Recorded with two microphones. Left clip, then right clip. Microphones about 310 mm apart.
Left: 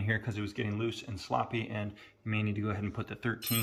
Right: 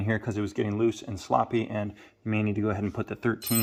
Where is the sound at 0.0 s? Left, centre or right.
Right.